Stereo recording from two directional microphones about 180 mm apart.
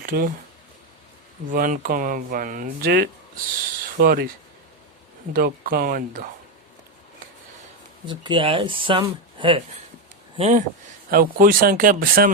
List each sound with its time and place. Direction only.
0.0 s speech: 55° right (ahead or behind)
1.5 s speech: 50° right (ahead or behind)
5.3 s speech: 55° right (ahead or behind)
8.0 s speech: 25° right (ahead or behind)
11.1 s speech: 50° right (ahead or behind)